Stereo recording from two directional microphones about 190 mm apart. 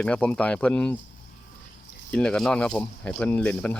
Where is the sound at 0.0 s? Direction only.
5° left (ahead or behind).